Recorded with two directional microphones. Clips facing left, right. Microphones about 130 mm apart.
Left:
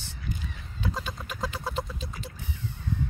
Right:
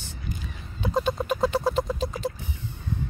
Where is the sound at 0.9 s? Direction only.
55° right (ahead or behind); by 2.3 s 90° right.